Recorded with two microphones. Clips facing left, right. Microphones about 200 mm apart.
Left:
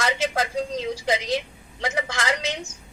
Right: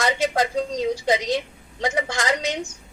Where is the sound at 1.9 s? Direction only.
30° right (ahead or behind).